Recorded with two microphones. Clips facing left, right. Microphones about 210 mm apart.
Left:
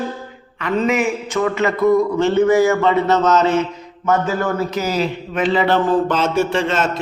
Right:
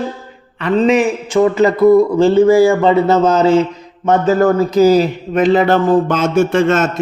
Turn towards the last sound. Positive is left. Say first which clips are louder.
# right 6 dB
turn(degrees=-50)  # may be behind; listen again after turning